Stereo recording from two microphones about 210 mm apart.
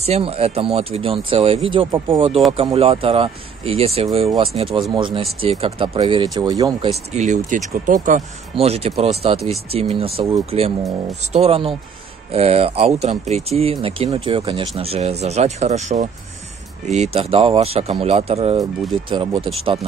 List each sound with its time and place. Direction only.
0.0 s speech: 30° right (ahead or behind)
6.9 s speech: 35° right (ahead or behind)